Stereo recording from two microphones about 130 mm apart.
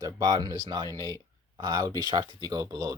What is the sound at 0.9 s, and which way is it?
Speech, 30° left (ahead or behind).